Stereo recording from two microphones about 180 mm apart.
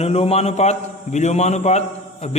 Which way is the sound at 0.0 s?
35° left (ahead or behind).